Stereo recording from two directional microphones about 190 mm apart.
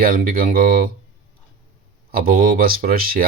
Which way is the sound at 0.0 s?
50° right (ahead or behind).